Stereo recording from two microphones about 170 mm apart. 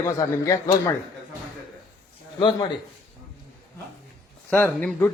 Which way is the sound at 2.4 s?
25° left (ahead or behind).